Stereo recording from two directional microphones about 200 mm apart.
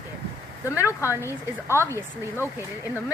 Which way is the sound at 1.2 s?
10° left (ahead or behind).